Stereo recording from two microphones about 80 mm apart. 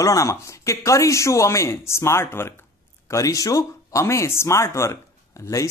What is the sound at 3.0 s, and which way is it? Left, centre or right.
Speech, left.